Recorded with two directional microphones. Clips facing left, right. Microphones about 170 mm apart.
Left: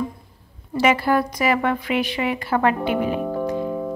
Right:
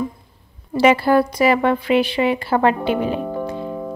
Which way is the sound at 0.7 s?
30° right (ahead or behind).